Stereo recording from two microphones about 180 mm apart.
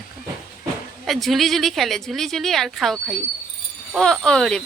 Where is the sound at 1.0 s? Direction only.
Centre (ahead or behind).